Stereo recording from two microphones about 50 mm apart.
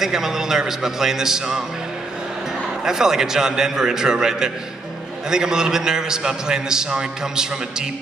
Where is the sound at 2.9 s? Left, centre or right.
Centre.